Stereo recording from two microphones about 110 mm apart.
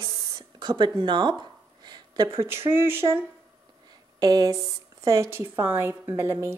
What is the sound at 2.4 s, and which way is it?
Speech, 20° right (ahead or behind).